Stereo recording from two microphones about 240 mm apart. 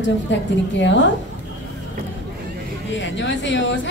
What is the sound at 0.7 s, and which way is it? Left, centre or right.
Speech, left.